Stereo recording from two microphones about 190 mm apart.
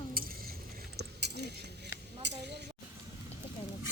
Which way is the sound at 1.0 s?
60° right (ahead or behind).